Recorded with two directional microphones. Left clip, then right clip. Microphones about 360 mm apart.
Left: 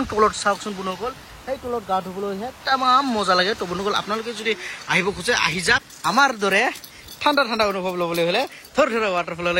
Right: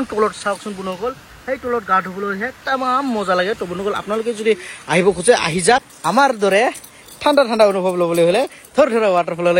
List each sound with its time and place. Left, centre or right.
0.0 s speech: centre